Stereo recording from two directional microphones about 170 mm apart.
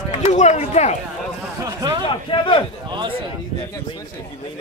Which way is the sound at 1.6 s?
25° right (ahead or behind).